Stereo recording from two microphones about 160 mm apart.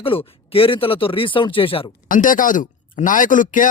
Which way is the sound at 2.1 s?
55° left (ahead or behind).